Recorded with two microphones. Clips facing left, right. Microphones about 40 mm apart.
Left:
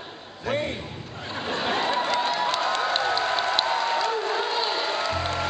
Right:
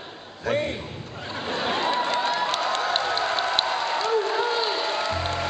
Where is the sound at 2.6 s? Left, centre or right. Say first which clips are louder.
Even; centre.